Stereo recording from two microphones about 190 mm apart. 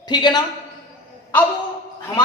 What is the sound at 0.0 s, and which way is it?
Speech, 25° left (ahead or behind).